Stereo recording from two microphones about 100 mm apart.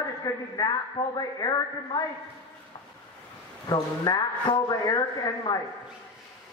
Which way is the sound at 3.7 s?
40° left (ahead or behind).